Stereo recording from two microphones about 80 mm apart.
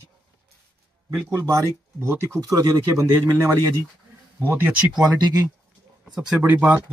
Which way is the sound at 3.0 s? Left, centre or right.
Right.